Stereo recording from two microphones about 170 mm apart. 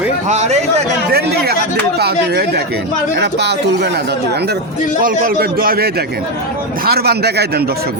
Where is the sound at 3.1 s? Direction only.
85° right.